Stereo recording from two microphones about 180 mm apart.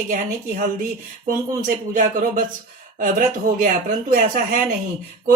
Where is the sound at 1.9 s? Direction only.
50° right (ahead or behind).